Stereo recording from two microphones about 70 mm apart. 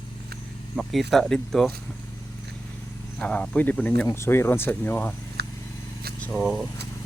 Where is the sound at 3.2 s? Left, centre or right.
Centre.